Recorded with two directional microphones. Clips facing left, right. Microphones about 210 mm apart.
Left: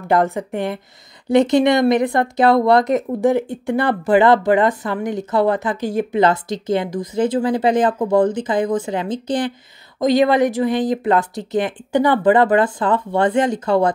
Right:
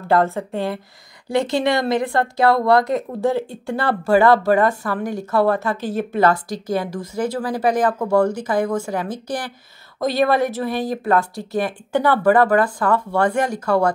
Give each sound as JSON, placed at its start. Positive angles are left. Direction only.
{"t": 0.1, "sound": "a woman's voice", "side_deg": 15}